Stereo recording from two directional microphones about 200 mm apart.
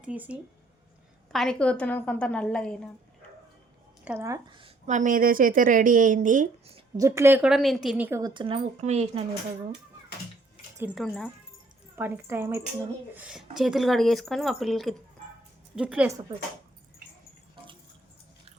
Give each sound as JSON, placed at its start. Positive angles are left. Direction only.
{"t": 0.0, "sound": "a woman's voice", "side_deg": -5}
{"t": 4.0, "sound": "a woman's voice", "side_deg": -10}
{"t": 4.9, "sound": "a woman's voice", "side_deg": -40}
{"t": 6.7, "sound": "a woman's voice", "side_deg": -15}
{"t": 8.3, "sound": "speech", "side_deg": -25}
{"t": 10.9, "sound": "a woman's voice", "side_deg": 5}
{"t": 11.9, "sound": "a woman's voice", "side_deg": -10}